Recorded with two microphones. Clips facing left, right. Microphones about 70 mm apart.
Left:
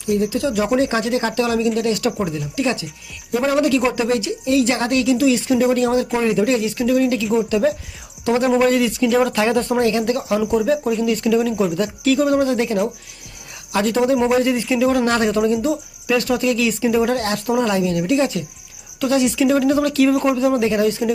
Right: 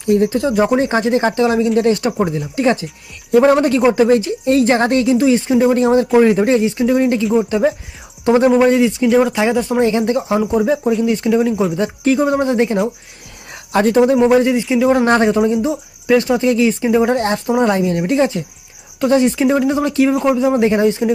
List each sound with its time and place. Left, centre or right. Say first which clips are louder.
0.1 s a man's voice: right 5 dB; right
8.4 s a man's voice: right 3 dB; centre
9.8 s a man's voice: right 3 dB; right
17.7 s speech: right 3 dB; right
19.5 s a man's voice: right 1 dB; centre
20.6 s a man's voice: right 4 dB; right